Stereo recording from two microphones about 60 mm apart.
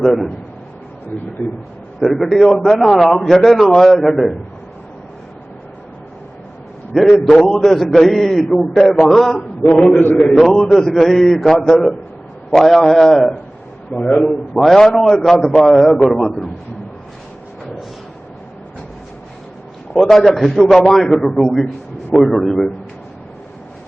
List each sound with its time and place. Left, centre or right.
0.0 s a man's voice: centre
2.0 s a man's voice: centre
6.9 s a man's voice: centre
13.9 s a man's voice: left
14.3 s a man's voice: centre
20.0 s a man's voice: centre